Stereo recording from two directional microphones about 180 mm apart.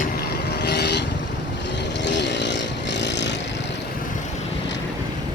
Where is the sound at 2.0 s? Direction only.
75° left (ahead or behind).